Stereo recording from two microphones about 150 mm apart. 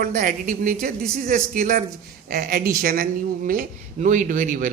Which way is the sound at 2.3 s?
85° right.